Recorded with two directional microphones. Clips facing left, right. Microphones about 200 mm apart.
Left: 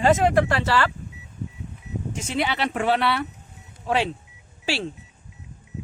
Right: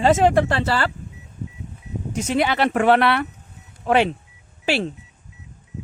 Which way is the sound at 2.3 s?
50° right (ahead or behind).